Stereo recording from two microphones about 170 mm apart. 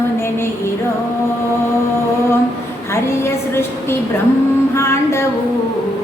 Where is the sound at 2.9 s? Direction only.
15° left (ahead or behind).